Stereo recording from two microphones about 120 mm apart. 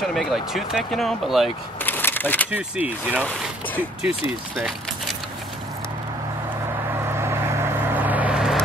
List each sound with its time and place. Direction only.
0.1 s speech: centre (ahead or behind)
1.8 s a sound: 15° left (ahead or behind)
2.5 s speech: 15° right (ahead or behind)
4.6 s speech: centre (ahead or behind)
6.9 s vehicle: 20° right (ahead or behind)